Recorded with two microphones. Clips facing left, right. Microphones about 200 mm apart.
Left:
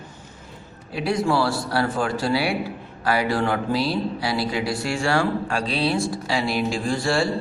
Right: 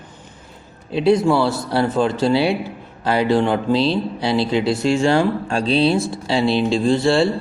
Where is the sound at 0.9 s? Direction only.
25° right (ahead or behind).